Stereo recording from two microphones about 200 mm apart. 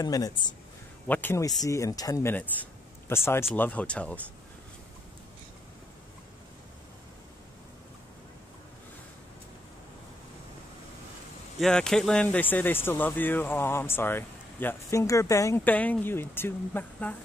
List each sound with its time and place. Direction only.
0.0 s speech: 20° left (ahead or behind)
11.6 s speech: 5° left (ahead or behind)